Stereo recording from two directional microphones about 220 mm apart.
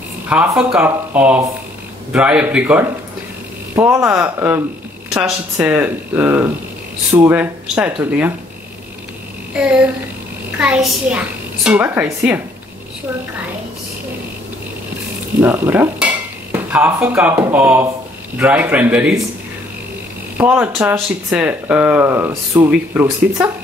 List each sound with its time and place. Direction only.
0.3 s a child's voice: 5° right (ahead or behind)
9.6 s a child's voice: 5° right (ahead or behind)
15.4 s speech: 10° right (ahead or behind)
20.3 s speech: 5° right (ahead or behind)